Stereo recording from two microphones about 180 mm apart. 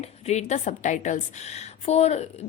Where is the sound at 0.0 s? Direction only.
40° left (ahead or behind).